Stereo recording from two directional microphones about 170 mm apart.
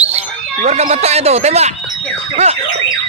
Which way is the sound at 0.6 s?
40° right (ahead or behind).